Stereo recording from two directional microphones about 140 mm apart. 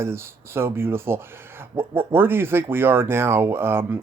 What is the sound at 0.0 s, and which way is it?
Speech, 20° right (ahead or behind).